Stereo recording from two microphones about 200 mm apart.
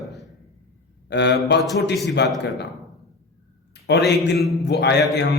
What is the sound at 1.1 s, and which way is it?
A man's voice, 60° left (ahead or behind).